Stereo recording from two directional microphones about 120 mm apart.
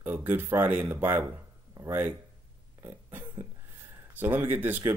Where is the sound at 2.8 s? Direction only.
20° right (ahead or behind).